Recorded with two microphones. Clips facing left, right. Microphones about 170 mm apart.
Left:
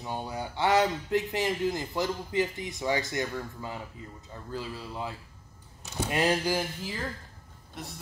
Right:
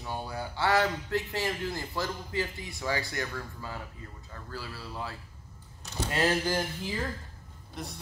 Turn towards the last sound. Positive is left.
turn(degrees=0)  # may be behind; listen again after turning